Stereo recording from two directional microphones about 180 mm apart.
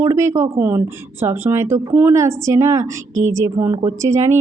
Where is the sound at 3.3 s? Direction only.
20° right (ahead or behind).